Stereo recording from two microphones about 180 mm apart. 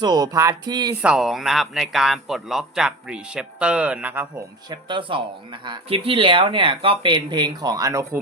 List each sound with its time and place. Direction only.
0.0 s speech: 20° right (ahead or behind)
1.0 s speech: 5° right (ahead or behind)
4.7 s speech: 25° right (ahead or behind)